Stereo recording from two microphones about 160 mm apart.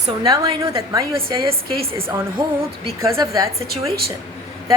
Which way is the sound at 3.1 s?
25° right (ahead or behind).